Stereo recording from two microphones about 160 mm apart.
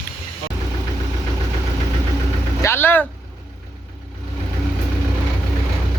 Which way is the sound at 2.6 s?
15° left (ahead or behind).